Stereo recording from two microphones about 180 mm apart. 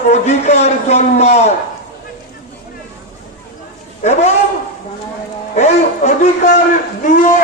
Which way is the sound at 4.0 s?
40° left (ahead or behind).